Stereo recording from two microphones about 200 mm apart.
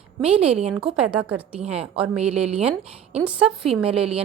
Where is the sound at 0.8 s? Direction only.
5° right (ahead or behind).